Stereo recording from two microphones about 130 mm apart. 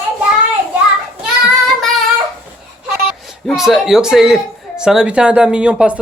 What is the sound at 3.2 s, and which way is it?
Speech, centre (ahead or behind).